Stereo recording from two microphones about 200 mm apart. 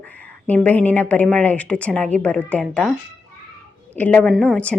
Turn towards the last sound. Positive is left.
turn(degrees=5)  # may be behind; listen again after turning